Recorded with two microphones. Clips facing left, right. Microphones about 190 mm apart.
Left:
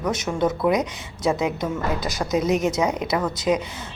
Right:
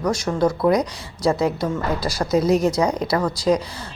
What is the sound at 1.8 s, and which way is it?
Speech, 20° left (ahead or behind).